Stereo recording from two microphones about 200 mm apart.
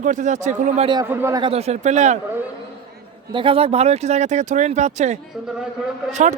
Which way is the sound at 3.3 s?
25° right (ahead or behind).